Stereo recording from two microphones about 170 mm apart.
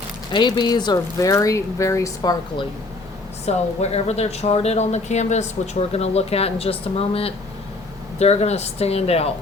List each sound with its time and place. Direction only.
0.3 s speech: 25° left (ahead or behind)
3.4 s speech: 40° left (ahead or behind)